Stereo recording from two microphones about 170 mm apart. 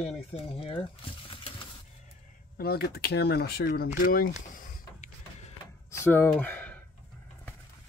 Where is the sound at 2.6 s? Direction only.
65° left (ahead or behind).